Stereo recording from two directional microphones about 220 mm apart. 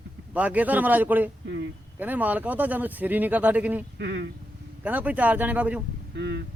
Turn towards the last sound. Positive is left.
turn(degrees=-50)  # may be behind; listen again after turning